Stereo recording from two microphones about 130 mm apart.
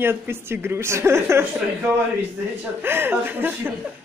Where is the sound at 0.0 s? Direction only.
20° right (ahead or behind).